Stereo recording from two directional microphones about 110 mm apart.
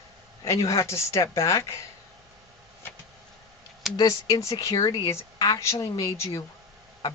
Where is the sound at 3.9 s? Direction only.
35° left (ahead or behind).